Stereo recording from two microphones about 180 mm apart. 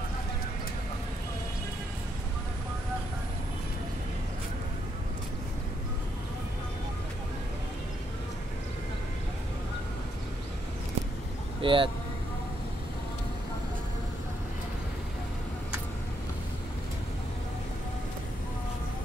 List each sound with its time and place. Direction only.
11.6 s speech: 30° right (ahead or behind)